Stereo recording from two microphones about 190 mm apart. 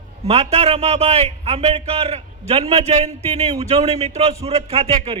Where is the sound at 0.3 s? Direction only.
35° right (ahead or behind).